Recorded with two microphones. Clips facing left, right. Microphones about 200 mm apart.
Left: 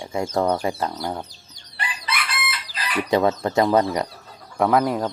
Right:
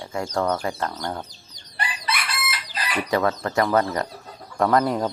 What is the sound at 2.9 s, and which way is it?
Speech, 20° left (ahead or behind).